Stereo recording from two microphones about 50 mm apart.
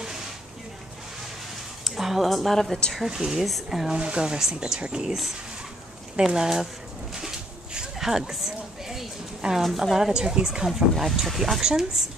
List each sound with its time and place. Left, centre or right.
1.9 s speech: centre
3.1 s speech: centre
3.4 s speech: centre
3.8 s speech: centre
6.2 s speech: centre
7.2 s a sound: centre
9.6 s speech: centre
9.9 s speech: centre
10.7 s speech: centre